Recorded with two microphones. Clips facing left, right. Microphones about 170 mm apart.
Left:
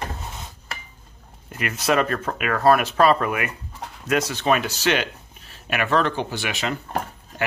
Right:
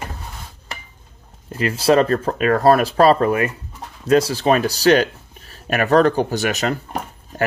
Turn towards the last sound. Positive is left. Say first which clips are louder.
# right 6 dB
turn(degrees=-40)  # may be behind; listen again after turning